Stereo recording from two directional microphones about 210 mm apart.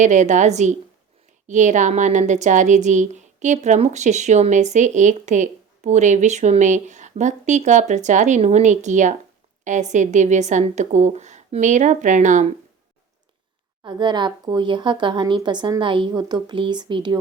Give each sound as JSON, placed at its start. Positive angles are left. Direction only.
{"t": 0.0, "sound": "a woman's voice", "side_deg": -35}
{"t": 13.8, "sound": "a woman's voice", "side_deg": -20}